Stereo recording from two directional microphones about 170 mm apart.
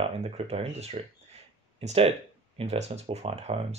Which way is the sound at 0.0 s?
35° right (ahead or behind).